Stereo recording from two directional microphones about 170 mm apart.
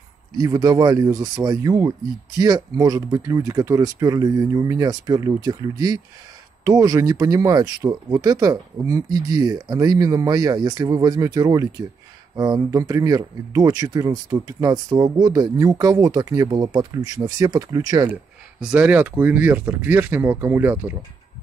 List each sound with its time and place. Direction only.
0.4 s speech: 20° right (ahead or behind)
18.6 s speech: 5° right (ahead or behind)